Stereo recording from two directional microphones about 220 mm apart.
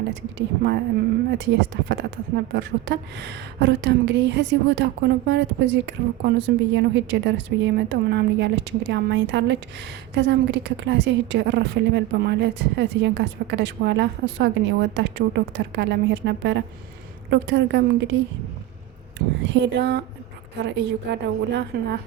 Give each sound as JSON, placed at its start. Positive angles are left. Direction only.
{"t": 0.3, "sound": "a woman's voice", "side_deg": -50}
{"t": 19.4, "sound": "a woman's voice", "side_deg": -50}